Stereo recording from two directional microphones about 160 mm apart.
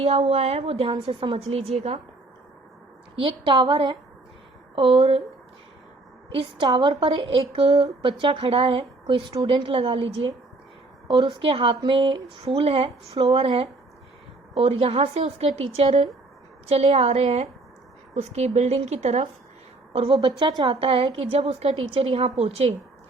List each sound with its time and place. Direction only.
0.0 s a woman's voice: 35° right (ahead or behind)
3.2 s a woman's voice: 30° right (ahead or behind)
6.3 s a woman's voice: 30° right (ahead or behind)